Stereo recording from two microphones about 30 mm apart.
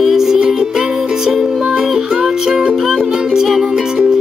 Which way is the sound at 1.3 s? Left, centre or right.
Centre.